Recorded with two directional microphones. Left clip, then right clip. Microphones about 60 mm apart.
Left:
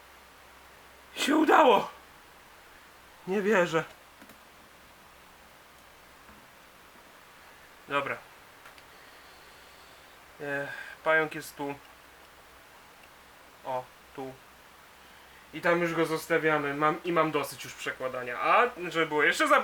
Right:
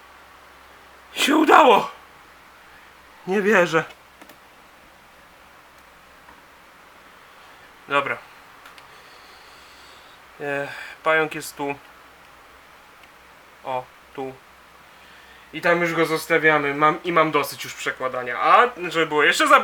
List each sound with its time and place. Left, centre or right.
1.1 s speech: right
3.2 s speech: right
7.9 s speech: right
10.4 s speech: right
13.7 s a sound: right
15.5 s speech: right